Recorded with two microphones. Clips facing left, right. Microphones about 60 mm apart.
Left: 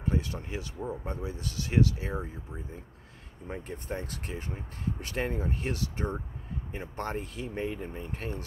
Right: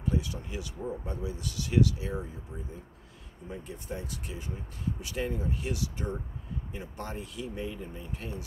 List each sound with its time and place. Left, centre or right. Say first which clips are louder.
0.0 s speech: even; left
3.4 s speech: left 2 dB; left